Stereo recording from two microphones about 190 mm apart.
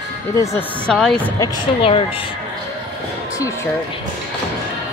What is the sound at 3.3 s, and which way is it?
Speech, 15° left (ahead or behind).